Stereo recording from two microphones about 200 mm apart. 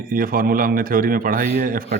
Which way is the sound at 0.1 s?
45° right (ahead or behind).